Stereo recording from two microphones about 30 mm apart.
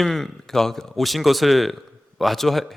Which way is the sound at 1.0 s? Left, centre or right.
Centre.